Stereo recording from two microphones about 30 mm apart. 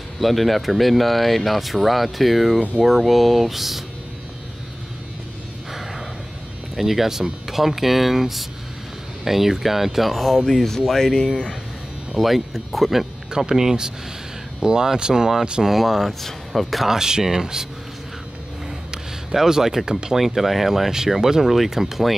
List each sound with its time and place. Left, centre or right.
0.2 s speech: centre
5.7 s a sound: centre
6.8 s speech: centre
10.1 s speech: centre
11.1 s speech: left
12.2 s speech: centre
13.5 s speech: right
15.8 s speech: centre
16.8 s speech: centre
19.3 s speech: centre
20.2 s speech: centre